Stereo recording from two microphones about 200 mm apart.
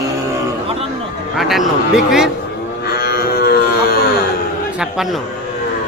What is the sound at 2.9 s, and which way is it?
Cattle, 50° left (ahead or behind).